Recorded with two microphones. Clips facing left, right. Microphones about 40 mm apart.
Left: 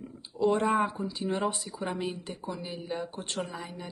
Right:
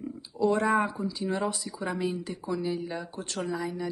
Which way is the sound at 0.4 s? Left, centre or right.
Left.